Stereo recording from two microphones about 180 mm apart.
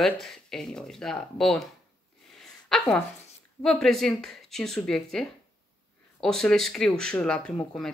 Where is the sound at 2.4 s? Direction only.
Centre (ahead or behind).